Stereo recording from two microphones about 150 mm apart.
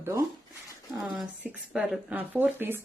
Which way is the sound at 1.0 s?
5° right (ahead or behind).